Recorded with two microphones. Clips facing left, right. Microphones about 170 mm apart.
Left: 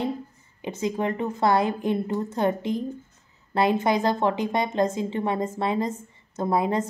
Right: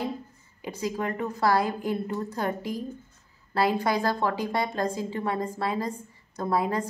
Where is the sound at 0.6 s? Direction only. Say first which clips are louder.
Left 4 dB; 25° left (ahead or behind).